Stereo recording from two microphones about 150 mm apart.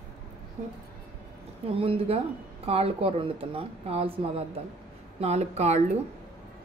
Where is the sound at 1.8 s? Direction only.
40° right (ahead or behind).